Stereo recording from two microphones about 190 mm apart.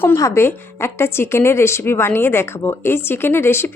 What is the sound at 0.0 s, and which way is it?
A woman's voice, 15° left (ahead or behind).